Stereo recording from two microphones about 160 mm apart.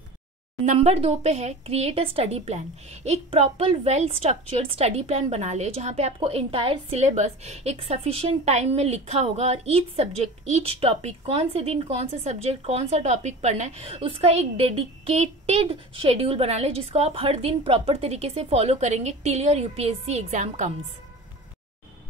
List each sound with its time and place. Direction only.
0.7 s a woman's voice: 40° right (ahead or behind)